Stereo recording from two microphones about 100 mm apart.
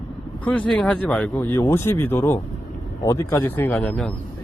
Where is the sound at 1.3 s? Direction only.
25° left (ahead or behind).